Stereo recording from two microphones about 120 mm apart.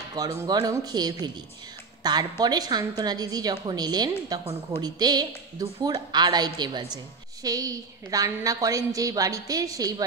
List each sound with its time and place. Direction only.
0.1 s a woman's voice: 35° right (ahead or behind)